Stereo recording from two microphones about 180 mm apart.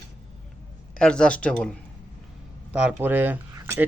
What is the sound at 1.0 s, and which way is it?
Speech, 5° left (ahead or behind).